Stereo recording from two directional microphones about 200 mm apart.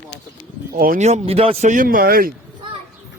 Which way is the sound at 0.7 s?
45° right (ahead or behind).